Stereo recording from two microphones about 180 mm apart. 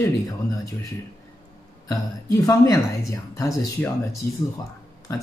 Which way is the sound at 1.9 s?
20° left (ahead or behind).